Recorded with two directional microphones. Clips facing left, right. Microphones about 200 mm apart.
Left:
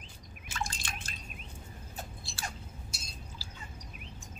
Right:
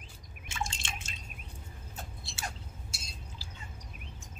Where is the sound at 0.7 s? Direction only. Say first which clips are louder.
Even; 25° right (ahead or behind).